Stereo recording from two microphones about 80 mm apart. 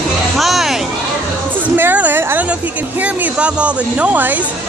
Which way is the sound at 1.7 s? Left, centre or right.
Right.